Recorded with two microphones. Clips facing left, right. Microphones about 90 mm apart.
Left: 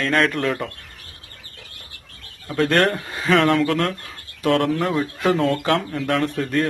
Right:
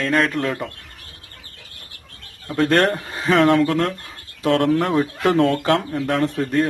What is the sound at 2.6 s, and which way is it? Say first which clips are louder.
Speech: right 1 dB; 30° right (ahead or behind).